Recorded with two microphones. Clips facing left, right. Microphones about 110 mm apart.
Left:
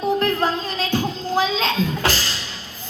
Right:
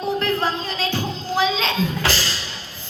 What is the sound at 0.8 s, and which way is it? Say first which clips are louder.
Music: left 2 dB; 50° left (ahead or behind).